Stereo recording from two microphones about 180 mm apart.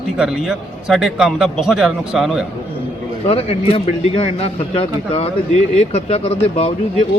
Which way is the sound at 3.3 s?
35° left (ahead or behind).